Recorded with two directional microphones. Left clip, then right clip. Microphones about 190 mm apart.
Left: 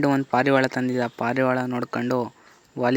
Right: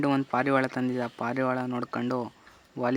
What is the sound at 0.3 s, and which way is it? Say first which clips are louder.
Speech: left 6 dB; 20° left (ahead or behind).